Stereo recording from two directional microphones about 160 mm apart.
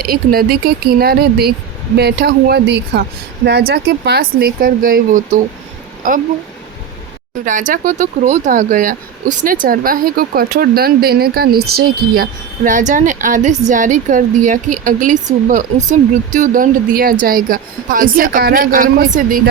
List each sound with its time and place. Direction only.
0.0 s speech: 70° right (ahead or behind)
2.0 s a woman's voice: 90° right; by 6.2 s 55° right (ahead or behind)
7.7 s a woman's voice: 55° right (ahead or behind)